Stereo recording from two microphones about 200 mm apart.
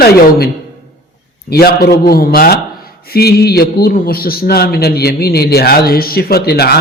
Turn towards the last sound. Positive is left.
turn(degrees=50)  # may be behind; listen again after turning